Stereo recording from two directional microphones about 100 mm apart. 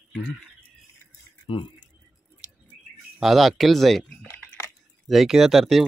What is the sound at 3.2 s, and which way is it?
Speech, centre (ahead or behind).